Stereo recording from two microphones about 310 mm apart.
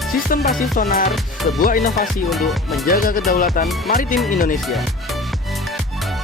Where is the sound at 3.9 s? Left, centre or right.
Left.